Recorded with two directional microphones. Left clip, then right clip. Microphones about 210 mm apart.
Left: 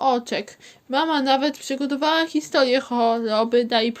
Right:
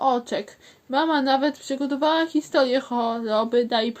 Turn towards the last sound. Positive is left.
turn(degrees=30)  # may be behind; listen again after turning